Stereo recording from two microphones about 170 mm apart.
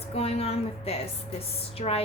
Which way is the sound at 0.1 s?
35° left (ahead or behind).